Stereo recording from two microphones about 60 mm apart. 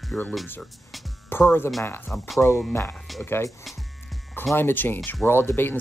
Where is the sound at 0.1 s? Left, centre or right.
Left.